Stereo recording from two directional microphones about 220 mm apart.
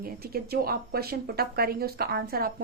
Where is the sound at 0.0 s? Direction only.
45° right (ahead or behind).